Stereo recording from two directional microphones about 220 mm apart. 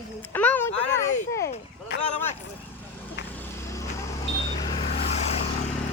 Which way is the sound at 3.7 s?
15° left (ahead or behind).